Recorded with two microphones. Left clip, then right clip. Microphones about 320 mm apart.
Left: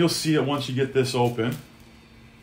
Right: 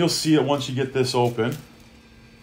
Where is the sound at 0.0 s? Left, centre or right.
Centre.